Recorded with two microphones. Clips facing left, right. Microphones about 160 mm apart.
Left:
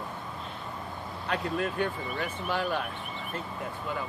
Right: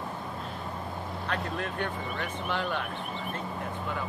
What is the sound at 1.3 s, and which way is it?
Speech, 5° left (ahead or behind).